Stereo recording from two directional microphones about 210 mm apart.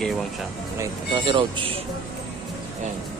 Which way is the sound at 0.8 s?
25° right (ahead or behind).